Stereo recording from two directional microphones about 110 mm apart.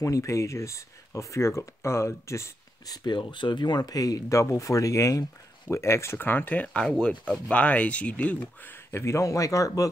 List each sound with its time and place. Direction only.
0.0 s speech: 30° left (ahead or behind)
3.2 s speech: 45° left (ahead or behind); by 9.7 s 30° left (ahead or behind)